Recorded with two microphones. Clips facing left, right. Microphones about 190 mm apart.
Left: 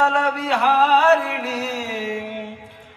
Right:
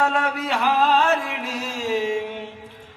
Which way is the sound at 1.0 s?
65° left (ahead or behind).